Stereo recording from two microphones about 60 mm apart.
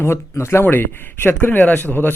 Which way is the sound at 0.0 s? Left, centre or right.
Left.